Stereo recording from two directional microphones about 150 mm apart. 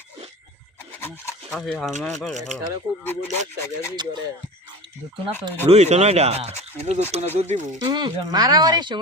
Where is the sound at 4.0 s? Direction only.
30° right (ahead or behind).